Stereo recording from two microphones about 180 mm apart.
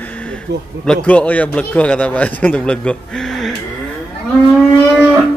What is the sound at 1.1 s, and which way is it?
Speech, 10° left (ahead or behind).